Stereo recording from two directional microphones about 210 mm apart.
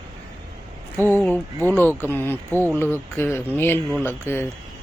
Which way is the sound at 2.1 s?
10° left (ahead or behind).